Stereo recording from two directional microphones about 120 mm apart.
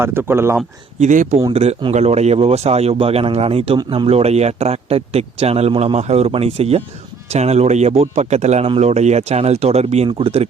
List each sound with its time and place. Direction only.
0.0 s speech: 20° right (ahead or behind)
0.9 s speech: 85° right
1.9 s a man's voice: 65° right (ahead or behind)
10.1 s speech: 50° right (ahead or behind)